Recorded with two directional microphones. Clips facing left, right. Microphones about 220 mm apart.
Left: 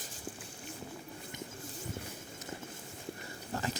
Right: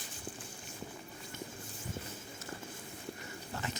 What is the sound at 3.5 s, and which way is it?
Dog, 35° left (ahead or behind).